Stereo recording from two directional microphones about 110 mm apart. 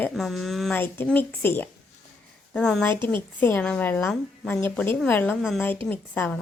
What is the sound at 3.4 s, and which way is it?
Speech, 15° left (ahead or behind).